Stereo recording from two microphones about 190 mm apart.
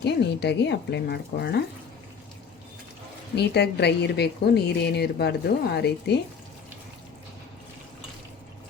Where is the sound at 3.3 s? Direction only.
60° left (ahead or behind).